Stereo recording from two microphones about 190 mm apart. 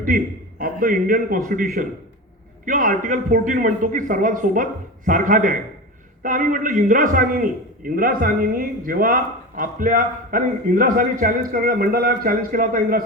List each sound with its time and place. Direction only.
0.6 s a man's voice: 45° right (ahead or behind)